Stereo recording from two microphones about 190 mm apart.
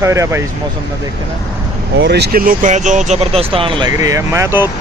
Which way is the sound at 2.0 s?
60° right (ahead or behind).